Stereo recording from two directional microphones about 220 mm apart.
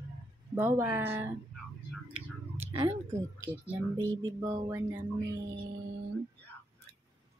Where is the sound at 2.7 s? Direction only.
20° right (ahead or behind).